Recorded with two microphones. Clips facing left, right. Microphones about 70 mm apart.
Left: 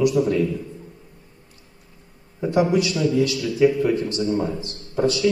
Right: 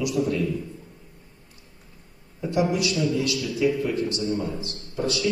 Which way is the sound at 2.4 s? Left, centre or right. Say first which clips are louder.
Left 4 dB; left.